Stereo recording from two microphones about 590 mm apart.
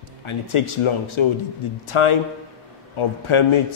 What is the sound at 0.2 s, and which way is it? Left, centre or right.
A man's voice, left.